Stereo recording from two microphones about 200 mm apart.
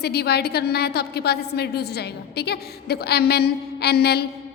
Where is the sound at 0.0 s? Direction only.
55° left (ahead or behind).